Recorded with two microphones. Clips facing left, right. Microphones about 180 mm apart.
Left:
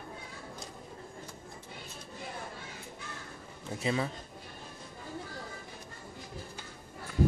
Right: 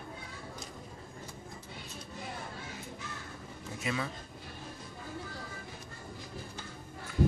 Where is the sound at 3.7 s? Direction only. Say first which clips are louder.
Left 4 dB; 30° left (ahead or behind).